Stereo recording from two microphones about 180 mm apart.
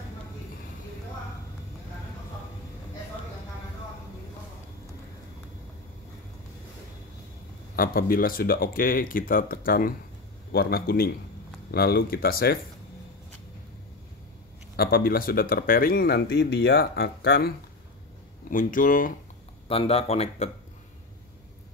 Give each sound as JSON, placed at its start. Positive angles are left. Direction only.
{"t": 7.7, "sound": "speech", "side_deg": 55}
{"t": 14.8, "sound": "speech", "side_deg": 55}
{"t": 18.5, "sound": "speech", "side_deg": 50}
{"t": 19.7, "sound": "speech", "side_deg": 35}